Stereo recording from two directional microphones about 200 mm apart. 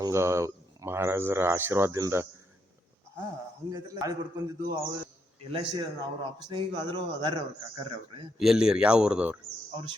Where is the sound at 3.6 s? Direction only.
15° right (ahead or behind).